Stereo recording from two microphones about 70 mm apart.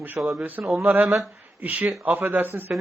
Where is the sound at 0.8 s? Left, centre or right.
Centre.